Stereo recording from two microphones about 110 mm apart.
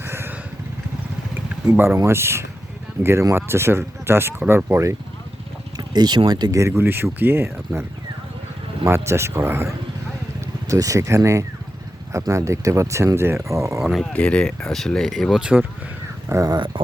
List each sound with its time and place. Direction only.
0.0 s vehicle: 20° right (ahead or behind)
1.7 s speech: 20° right (ahead or behind)
5.7 s speech: 40° right (ahead or behind); by 7.5 s 20° right (ahead or behind)
8.8 s speech: 25° right (ahead or behind)
13.7 s speech: 5° right (ahead or behind)
14.0 s speech: 10° left (ahead or behind)
15.4 s speech: 10° right (ahead or behind)
16.3 s speech: 30° right (ahead or behind)